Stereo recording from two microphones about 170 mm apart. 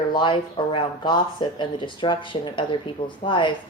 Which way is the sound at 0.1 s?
25° left (ahead or behind).